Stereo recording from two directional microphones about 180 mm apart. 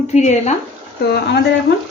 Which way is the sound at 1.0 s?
65° left (ahead or behind).